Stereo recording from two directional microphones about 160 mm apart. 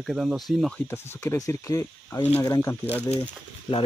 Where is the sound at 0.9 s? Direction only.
15° left (ahead or behind).